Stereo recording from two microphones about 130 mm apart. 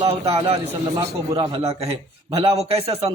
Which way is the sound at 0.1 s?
55° right (ahead or behind).